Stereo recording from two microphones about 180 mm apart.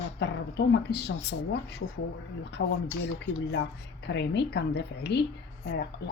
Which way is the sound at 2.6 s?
90° left.